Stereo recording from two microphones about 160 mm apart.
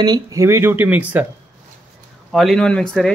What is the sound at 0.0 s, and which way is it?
Speech, 25° right (ahead or behind).